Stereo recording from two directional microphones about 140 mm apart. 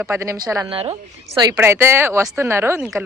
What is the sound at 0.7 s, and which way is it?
Speech, 45° right (ahead or behind).